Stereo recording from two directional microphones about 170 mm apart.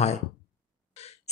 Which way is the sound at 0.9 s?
40° left (ahead or behind).